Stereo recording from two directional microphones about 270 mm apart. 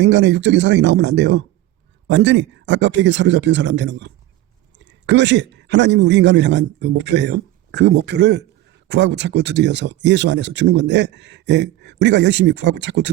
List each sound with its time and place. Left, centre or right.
0.0 s speech: right